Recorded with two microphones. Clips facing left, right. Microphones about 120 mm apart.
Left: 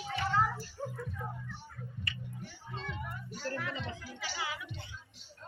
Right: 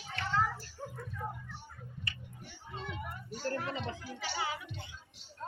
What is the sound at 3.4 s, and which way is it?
A woman's voice, 35° right (ahead or behind).